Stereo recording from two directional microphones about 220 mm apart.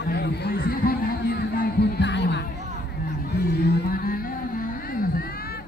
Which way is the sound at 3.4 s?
45° left (ahead or behind).